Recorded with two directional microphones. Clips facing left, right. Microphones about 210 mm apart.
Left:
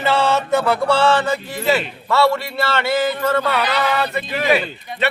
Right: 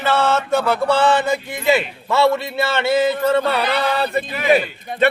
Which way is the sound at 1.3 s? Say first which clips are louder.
Right 1 dB; 20° right (ahead or behind).